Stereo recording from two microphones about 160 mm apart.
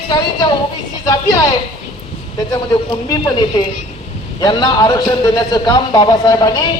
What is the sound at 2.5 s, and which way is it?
A man's voice, 25° left (ahead or behind).